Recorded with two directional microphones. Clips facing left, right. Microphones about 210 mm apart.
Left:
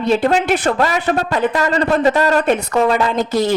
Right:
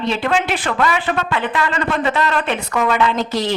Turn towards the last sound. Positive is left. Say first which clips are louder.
# left 3 dB
turn(degrees=45)  # may be behind; listen again after turning